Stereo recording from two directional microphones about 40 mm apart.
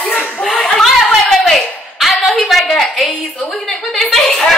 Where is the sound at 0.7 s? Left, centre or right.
Centre.